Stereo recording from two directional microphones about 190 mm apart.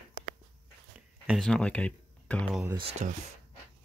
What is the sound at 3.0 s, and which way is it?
Speech, 40° right (ahead or behind).